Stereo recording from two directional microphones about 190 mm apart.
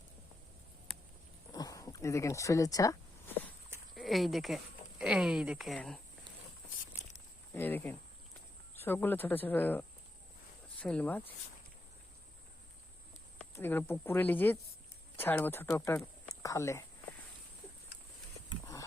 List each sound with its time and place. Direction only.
1.5 s a sound: 20° left (ahead or behind)
3.9 s speech: centre (ahead or behind)
7.5 s speech: 10° left (ahead or behind)
13.4 s speech: 10° left (ahead or behind)